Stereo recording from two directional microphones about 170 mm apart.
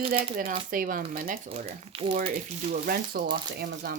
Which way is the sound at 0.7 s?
55° right (ahead or behind).